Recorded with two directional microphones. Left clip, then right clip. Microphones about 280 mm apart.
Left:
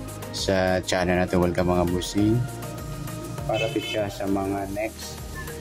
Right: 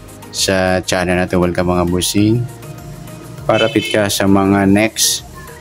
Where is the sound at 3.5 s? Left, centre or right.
Centre.